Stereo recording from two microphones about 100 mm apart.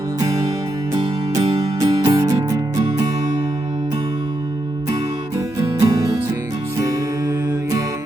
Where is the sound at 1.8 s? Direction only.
35° right (ahead or behind).